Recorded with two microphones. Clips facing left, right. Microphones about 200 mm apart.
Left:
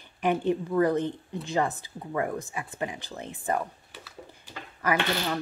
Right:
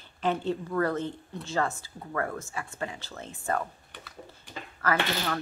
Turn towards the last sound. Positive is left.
turn(degrees=15)  # may be behind; listen again after turning